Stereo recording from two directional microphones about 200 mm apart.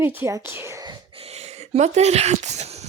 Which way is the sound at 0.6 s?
15° right (ahead or behind).